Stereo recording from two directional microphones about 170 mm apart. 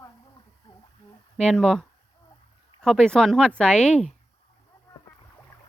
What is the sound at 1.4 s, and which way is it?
Speech, 5° left (ahead or behind).